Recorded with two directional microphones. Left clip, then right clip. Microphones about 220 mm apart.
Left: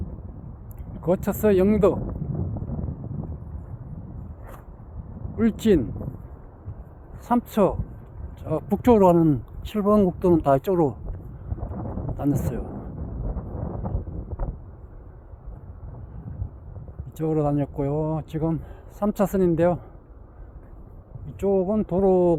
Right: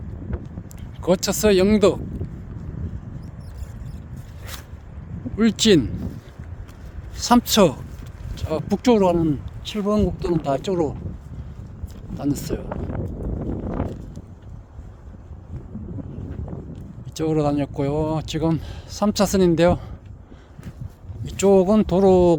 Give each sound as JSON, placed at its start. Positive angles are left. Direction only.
{"t": 1.0, "sound": "speech", "side_deg": -15}
{"t": 5.4, "sound": "speech", "side_deg": -15}
{"t": 7.3, "sound": "speech", "side_deg": -20}
{"t": 8.4, "sound": "speech", "side_deg": -10}
{"t": 12.1, "sound": "speech", "side_deg": 0}
{"t": 17.2, "sound": "speech", "side_deg": -10}
{"t": 21.2, "sound": "speech", "side_deg": -30}